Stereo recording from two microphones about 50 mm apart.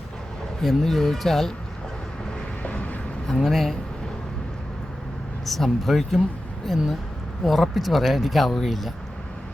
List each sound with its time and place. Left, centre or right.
0.6 s speech: centre
2.6 s vehicle: left
3.2 s speech: centre
5.5 s speech: centre